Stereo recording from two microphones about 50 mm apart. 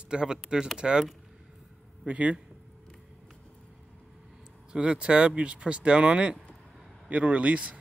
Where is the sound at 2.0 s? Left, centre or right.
Right.